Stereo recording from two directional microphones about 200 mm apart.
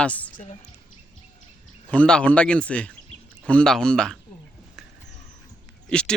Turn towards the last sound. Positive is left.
turn(degrees=5)  # may be behind; listen again after turning